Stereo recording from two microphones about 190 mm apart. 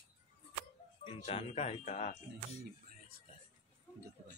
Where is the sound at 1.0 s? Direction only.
30° left (ahead or behind).